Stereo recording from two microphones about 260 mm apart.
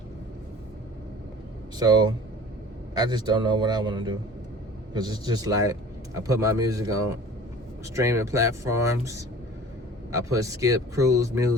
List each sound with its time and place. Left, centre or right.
1.8 s speech: centre